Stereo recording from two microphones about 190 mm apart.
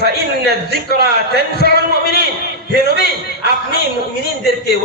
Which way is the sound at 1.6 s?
60° left (ahead or behind).